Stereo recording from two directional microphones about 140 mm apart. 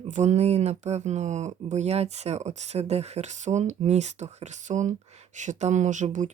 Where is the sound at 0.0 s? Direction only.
55° right (ahead or behind).